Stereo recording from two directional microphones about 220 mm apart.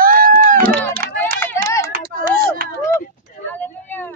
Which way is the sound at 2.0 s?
40° right (ahead or behind).